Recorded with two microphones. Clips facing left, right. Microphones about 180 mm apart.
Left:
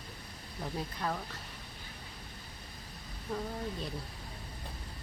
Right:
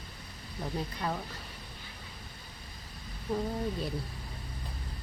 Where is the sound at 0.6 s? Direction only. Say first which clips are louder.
Right 2 dB; 5° right (ahead or behind).